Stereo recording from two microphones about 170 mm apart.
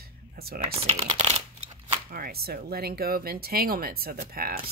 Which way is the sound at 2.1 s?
65° right (ahead or behind).